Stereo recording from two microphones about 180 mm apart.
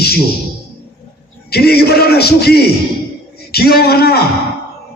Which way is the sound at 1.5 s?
60° left (ahead or behind).